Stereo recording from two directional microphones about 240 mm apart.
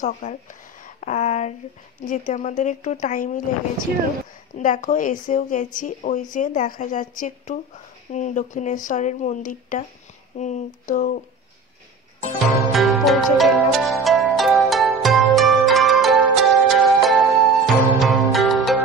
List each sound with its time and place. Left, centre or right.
0.0 s speech: left
4.6 s speech: left
12.7 s music: centre
14.0 s pizzicato: centre